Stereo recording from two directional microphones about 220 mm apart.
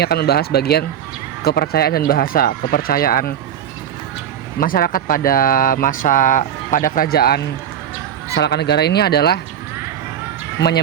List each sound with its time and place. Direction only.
0.0 s speech: 45° left (ahead or behind)
4.6 s speech: 40° left (ahead or behind)
10.6 s speech: 50° left (ahead or behind)